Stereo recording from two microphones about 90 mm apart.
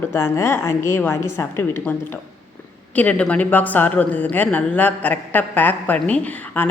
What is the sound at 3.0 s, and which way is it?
Speech, 15° left (ahead or behind).